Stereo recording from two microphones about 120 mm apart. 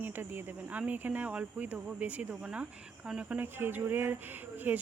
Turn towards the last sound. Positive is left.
turn(degrees=-15)  # may be behind; listen again after turning